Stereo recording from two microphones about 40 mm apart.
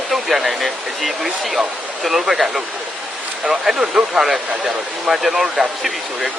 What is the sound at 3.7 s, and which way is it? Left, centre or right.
Speech, centre.